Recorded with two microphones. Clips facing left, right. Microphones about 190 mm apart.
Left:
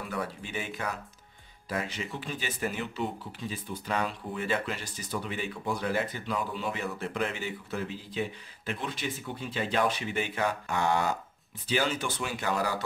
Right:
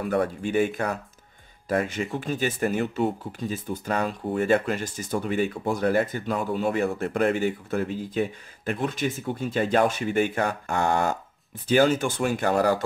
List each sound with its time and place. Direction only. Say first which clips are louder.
0.0 s speech: right 10 dB; 50° right (ahead or behind)